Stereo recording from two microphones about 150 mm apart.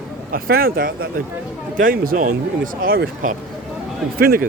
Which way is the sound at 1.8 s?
65° right (ahead or behind).